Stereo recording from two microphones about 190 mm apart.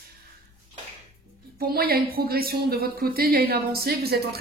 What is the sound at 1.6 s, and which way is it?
A woman's voice, 55° right (ahead or behind).